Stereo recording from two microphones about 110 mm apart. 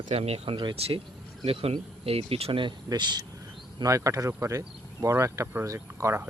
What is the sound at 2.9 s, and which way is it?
Speech, 40° right (ahead or behind).